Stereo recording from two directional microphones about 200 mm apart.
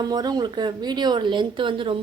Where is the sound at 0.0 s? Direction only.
20° right (ahead or behind).